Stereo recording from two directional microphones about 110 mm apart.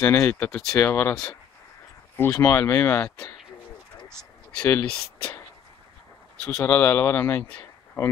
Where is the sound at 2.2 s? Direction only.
25° left (ahead or behind).